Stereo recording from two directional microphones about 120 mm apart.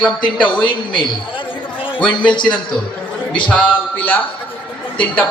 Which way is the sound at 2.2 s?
40° left (ahead or behind).